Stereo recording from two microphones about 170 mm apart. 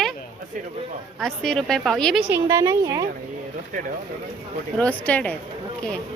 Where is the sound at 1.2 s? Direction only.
5° left (ahead or behind).